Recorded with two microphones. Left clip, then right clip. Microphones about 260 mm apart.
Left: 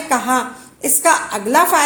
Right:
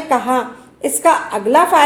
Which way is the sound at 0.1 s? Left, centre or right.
Left.